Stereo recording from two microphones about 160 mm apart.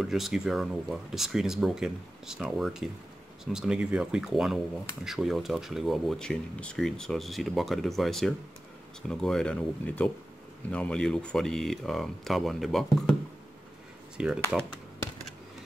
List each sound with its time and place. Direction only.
0.0 s speech: centre (ahead or behind)
14.1 s speech: 5° right (ahead or behind)